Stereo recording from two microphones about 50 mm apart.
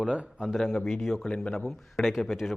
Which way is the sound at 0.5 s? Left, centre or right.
Centre.